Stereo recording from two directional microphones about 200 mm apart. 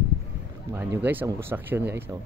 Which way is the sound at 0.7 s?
10° right (ahead or behind).